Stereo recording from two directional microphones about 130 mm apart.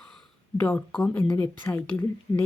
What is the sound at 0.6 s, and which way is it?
Speech, 15° left (ahead or behind).